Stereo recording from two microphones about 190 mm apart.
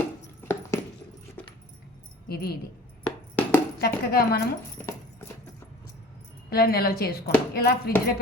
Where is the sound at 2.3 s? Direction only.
55° left (ahead or behind).